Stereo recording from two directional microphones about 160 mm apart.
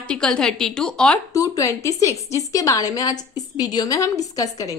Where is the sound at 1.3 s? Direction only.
20° left (ahead or behind).